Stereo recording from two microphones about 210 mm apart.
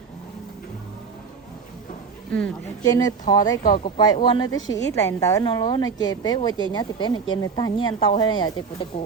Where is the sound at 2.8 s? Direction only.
15° left (ahead or behind).